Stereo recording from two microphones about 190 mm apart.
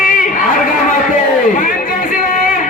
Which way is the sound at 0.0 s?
45° left (ahead or behind).